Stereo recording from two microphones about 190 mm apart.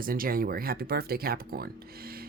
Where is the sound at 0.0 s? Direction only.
50° right (ahead or behind).